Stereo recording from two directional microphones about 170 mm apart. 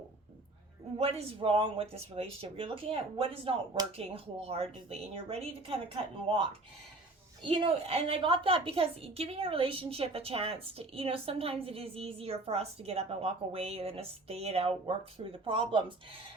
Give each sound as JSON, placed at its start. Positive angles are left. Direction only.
{"t": 0.9, "sound": "a woman's voice", "side_deg": -35}